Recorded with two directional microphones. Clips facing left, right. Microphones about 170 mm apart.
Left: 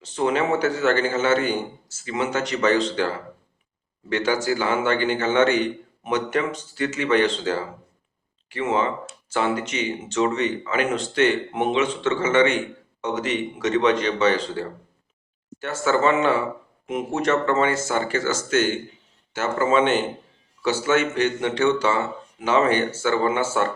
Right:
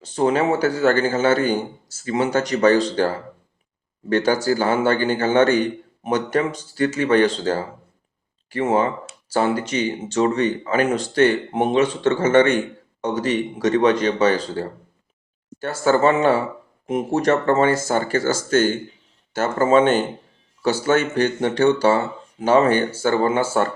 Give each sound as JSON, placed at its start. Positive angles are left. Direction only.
{"t": 0.1, "sound": "speech", "side_deg": -35}
{"t": 8.4, "sound": "speech", "side_deg": -40}